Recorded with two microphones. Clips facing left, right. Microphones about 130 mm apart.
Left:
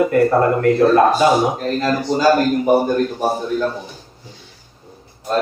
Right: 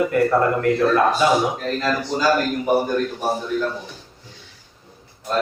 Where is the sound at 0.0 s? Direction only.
40° left (ahead or behind).